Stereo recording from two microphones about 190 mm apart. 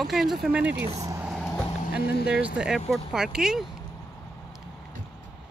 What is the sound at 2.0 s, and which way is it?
Speech, 55° left (ahead or behind).